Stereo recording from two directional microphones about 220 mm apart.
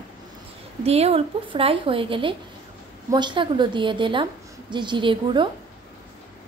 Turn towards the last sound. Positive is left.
turn(degrees=-20)  # may be behind; listen again after turning